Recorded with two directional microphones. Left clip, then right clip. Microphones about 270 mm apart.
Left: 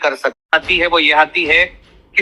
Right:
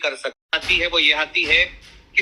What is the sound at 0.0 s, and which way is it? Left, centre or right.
A man's voice, left.